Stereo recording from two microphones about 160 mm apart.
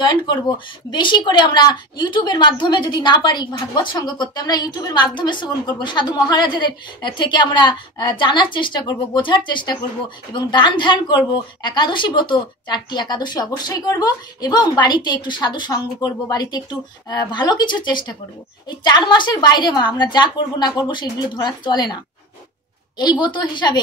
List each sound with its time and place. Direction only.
0.0 s a woman's voice: 25° left (ahead or behind)
22.9 s a woman's voice: 30° left (ahead or behind)